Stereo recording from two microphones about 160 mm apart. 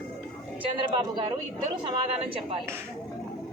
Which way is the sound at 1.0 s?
25° right (ahead or behind).